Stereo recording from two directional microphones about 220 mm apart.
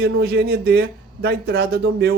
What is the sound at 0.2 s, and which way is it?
Speech, 45° right (ahead or behind).